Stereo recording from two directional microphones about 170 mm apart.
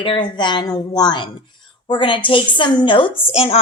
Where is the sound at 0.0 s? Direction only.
30° left (ahead or behind).